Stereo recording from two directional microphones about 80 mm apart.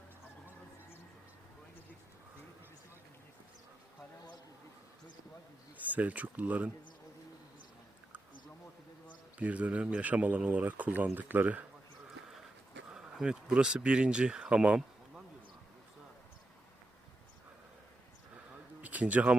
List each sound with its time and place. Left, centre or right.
5.7 s speech: centre
9.4 s speech: centre
12.9 s speech: centre
18.8 s a sound: centre